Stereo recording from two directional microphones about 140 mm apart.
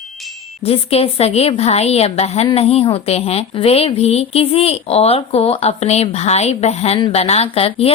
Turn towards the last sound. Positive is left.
turn(degrees=45)  # may be behind; listen again after turning